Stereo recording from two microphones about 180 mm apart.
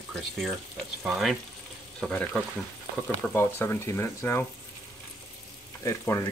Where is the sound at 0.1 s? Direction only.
Centre (ahead or behind).